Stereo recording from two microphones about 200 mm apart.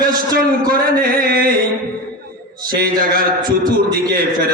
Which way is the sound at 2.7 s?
45° right (ahead or behind).